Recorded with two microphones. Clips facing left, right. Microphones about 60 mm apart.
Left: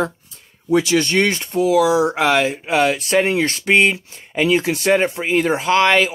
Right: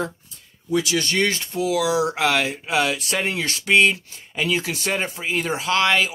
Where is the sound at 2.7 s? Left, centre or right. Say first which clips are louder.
Left 5 dB; left.